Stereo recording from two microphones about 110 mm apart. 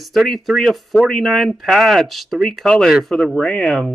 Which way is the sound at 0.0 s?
Centre (ahead or behind).